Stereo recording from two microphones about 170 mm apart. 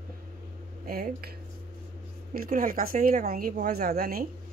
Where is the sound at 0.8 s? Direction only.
65° right (ahead or behind).